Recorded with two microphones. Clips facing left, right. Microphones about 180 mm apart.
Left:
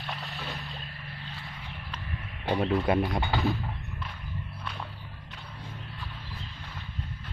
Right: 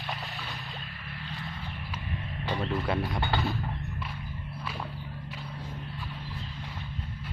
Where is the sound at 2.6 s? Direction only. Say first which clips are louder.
Left 5 dB; 20° left (ahead or behind).